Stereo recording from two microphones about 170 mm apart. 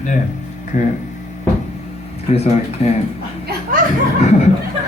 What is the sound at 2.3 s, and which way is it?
Speech, 40° left (ahead or behind).